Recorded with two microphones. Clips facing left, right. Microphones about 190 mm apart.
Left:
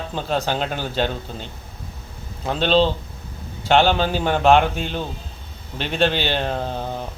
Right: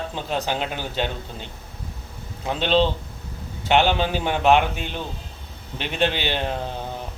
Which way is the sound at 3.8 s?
15° right (ahead or behind).